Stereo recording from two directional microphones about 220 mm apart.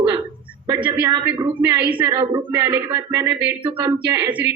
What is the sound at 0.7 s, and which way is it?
Speech, 20° right (ahead or behind).